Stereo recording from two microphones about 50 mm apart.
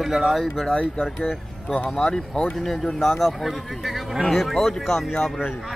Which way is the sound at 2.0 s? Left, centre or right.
Centre.